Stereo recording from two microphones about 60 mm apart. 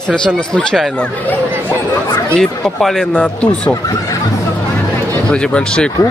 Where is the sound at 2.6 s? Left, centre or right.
Centre.